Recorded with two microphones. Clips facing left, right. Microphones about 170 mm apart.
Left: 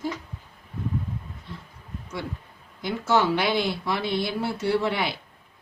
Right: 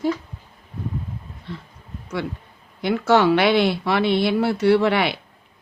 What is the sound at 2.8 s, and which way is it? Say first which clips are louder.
Speech: right 6 dB; 70° right (ahead or behind).